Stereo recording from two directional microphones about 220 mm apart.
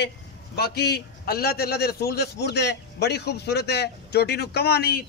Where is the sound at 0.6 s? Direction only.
45° left (ahead or behind).